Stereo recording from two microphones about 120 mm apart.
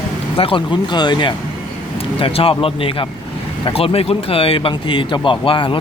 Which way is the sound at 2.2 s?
50° left (ahead or behind).